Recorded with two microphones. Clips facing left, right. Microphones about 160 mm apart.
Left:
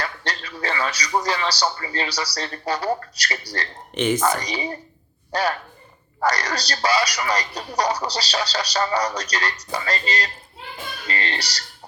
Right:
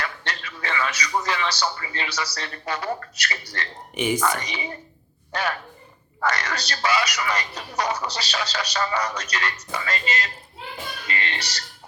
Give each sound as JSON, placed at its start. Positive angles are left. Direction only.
{"t": 0.0, "sound": "a man's voice", "side_deg": 35}
{"t": 3.9, "sound": "speech", "side_deg": -10}
{"t": 4.2, "sound": "a man's voice", "side_deg": 35}
{"t": 11.1, "sound": "music", "side_deg": 35}